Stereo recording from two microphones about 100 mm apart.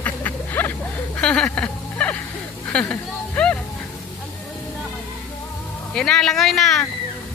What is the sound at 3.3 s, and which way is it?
Music, 10° left (ahead or behind).